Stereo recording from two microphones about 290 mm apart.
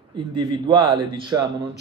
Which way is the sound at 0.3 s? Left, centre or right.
Centre.